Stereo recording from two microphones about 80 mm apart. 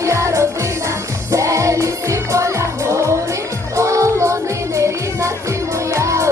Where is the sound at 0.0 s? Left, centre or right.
Right.